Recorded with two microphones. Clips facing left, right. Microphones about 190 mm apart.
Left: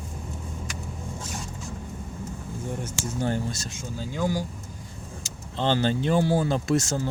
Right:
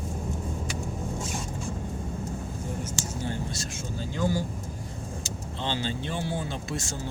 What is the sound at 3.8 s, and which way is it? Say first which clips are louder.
Speech: left 1 dB; 15° left (ahead or behind).